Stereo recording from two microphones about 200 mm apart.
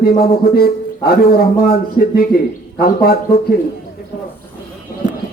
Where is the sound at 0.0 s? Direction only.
50° left (ahead or behind).